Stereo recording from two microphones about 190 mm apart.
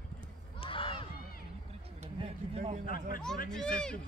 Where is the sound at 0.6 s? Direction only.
25° left (ahead or behind).